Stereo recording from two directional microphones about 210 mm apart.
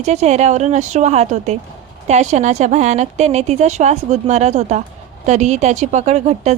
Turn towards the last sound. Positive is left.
turn(degrees=-30)  # may be behind; listen again after turning